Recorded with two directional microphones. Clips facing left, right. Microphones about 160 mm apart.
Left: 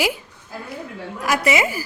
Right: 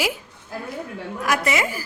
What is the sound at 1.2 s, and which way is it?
Speech, 5° left (ahead or behind).